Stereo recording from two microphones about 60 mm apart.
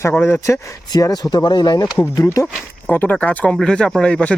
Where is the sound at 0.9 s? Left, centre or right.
Left.